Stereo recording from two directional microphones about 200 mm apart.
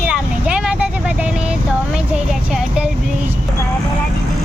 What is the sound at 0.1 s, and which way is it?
Vehicle, 5° right (ahead or behind).